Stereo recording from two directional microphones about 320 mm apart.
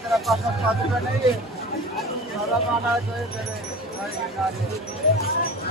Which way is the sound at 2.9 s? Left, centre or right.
Centre.